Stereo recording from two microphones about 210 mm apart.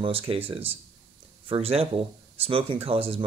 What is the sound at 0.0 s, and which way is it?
Speech, 25° right (ahead or behind).